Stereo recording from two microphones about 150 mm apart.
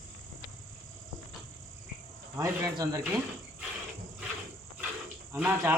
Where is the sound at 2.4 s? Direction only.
20° right (ahead or behind).